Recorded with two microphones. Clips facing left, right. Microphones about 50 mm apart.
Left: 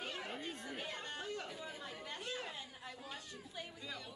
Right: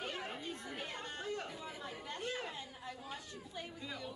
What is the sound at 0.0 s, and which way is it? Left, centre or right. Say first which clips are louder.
Chatter: right 2 dB; right.